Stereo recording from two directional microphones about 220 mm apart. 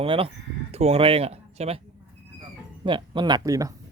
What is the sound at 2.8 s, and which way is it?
Speech, 20° right (ahead or behind).